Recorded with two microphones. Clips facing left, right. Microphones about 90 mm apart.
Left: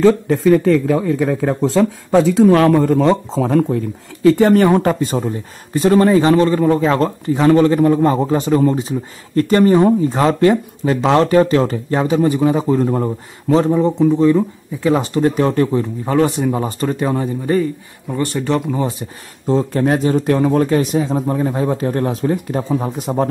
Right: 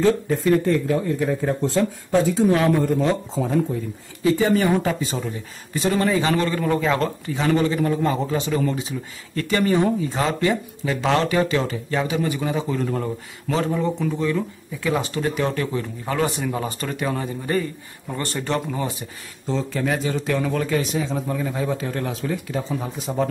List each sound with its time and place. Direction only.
0.0 s a man's voice: 90° left; by 15.9 s 30° left (ahead or behind)
16.1 s speech: 15° left (ahead or behind)
19.4 s a man's voice: 45° left (ahead or behind)